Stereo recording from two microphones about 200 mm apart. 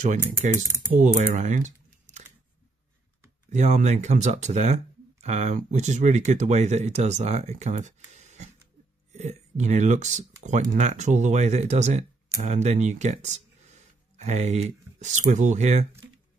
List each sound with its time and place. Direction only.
0.9 s speech: 35° right (ahead or behind)
3.4 s speech: 35° right (ahead or behind)